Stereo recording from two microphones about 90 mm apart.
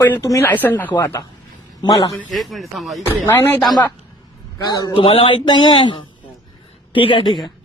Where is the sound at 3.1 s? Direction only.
25° left (ahead or behind).